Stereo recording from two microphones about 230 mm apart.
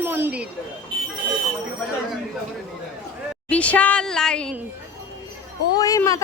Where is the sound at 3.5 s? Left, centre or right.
Centre.